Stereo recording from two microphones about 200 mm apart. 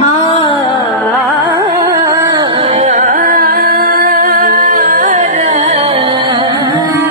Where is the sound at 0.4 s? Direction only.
20° left (ahead or behind).